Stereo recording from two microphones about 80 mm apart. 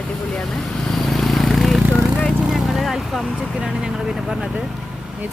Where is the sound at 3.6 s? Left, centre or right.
Centre.